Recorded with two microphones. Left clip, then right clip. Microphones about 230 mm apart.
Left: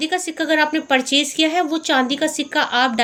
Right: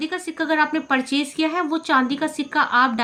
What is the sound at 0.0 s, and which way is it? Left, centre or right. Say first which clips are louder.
A woman's voice: left 4 dB; centre.